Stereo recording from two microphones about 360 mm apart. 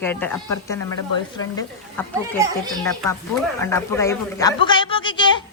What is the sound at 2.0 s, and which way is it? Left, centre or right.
Speech, centre.